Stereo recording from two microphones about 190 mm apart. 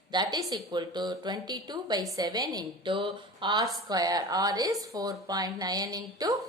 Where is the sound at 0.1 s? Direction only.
20° right (ahead or behind).